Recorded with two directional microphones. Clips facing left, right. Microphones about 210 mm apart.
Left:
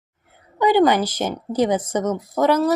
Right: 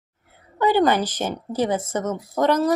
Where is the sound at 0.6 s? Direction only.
15° left (ahead or behind).